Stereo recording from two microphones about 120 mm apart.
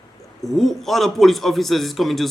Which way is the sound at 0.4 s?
Centre (ahead or behind).